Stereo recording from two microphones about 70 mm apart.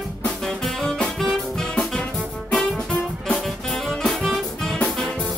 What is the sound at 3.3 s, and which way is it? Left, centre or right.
Music, centre.